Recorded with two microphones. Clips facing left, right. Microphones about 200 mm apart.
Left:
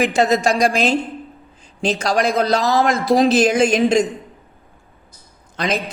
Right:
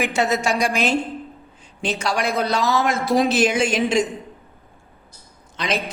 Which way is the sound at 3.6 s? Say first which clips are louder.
Left 5 dB; 40° left (ahead or behind).